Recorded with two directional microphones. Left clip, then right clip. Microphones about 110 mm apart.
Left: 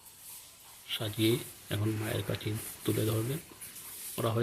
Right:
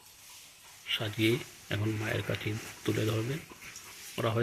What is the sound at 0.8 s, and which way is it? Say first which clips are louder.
Speech: right 1 dB; 10° left (ahead or behind).